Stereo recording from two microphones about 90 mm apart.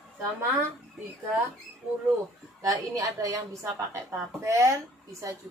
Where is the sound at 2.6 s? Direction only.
40° right (ahead or behind).